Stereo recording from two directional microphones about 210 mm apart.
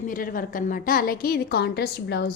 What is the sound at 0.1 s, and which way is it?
A woman's voice, 40° left (ahead or behind).